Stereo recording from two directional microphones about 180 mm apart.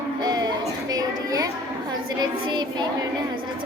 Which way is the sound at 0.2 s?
25° right (ahead or behind).